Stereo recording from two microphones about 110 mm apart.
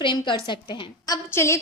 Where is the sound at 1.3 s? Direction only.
25° left (ahead or behind).